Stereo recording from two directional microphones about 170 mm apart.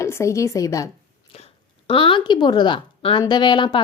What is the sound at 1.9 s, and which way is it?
A woman's voice, 30° left (ahead or behind).